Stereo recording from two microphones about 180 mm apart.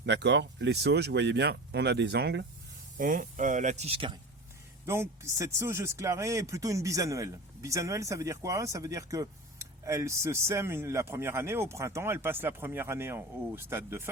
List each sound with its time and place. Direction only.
0.0 s speech: 70° right (ahead or behind)
3.0 s speech: 45° right (ahead or behind); by 4.2 s 30° right (ahead or behind)
4.9 s speech: 15° right (ahead or behind)